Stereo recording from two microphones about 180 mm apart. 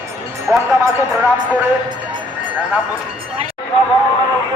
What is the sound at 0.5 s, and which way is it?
Music, 10° right (ahead or behind).